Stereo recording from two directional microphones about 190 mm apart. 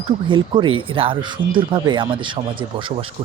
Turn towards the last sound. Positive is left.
turn(degrees=-25)  # may be behind; listen again after turning